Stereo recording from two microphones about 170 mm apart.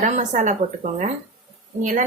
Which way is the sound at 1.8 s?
50° right (ahead or behind).